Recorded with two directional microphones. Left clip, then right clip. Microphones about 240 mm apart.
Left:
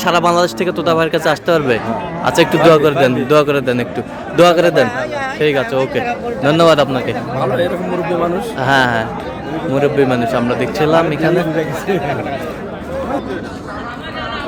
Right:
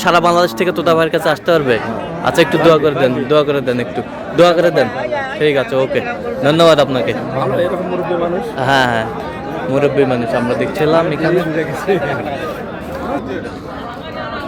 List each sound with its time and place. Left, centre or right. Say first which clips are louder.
0.0 s a man's voice: right 1 dB; centre
8.5 s speech: even; centre